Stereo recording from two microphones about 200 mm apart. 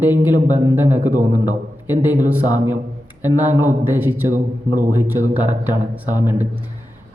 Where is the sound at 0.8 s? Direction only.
35° right (ahead or behind).